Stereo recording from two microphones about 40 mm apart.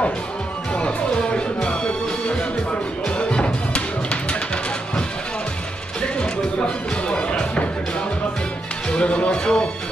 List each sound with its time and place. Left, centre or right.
0.7 s music: left
5.9 s music: left
8.9 s speech: left